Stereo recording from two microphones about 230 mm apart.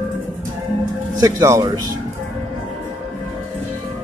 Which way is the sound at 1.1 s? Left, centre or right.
Centre.